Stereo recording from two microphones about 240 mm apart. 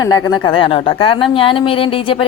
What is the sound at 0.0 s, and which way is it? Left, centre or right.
A woman's voice, centre.